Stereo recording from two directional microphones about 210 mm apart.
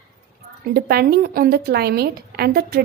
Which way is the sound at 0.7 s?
50° right (ahead or behind).